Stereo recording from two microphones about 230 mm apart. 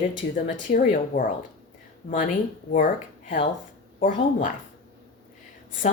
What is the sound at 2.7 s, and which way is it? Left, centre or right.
Speech, left.